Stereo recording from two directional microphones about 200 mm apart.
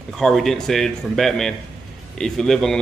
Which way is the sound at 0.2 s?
Centre (ahead or behind).